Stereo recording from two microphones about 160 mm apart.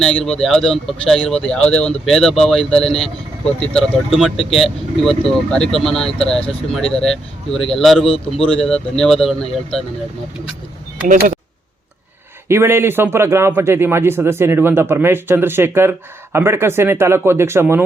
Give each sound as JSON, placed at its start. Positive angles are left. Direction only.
{"t": 0.0, "sound": "speech", "side_deg": 5}
{"t": 8.0, "sound": "a man's voice", "side_deg": 35}
{"t": 8.6, "sound": "speech", "side_deg": 5}
{"t": 12.5, "sound": "speech", "side_deg": -15}